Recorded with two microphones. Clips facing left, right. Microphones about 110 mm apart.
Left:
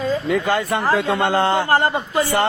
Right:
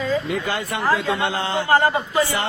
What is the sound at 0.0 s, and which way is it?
Speech, 45° left (ahead or behind).